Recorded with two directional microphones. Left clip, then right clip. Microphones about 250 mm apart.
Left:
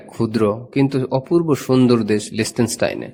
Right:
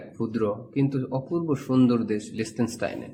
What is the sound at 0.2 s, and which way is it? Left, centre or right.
A man's voice, left.